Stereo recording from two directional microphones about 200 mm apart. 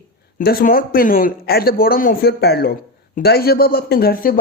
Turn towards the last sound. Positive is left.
turn(degrees=45)  # may be behind; listen again after turning